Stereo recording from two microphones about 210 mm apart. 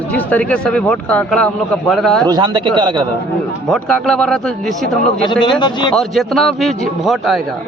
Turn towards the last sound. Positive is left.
turn(degrees=0)  # may be behind; listen again after turning